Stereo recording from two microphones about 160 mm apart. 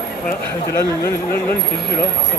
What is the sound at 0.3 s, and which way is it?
Speech, 80° left.